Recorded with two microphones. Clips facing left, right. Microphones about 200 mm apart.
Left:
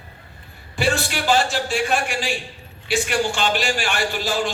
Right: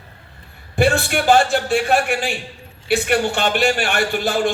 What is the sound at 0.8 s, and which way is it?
A man's voice, 55° right (ahead or behind).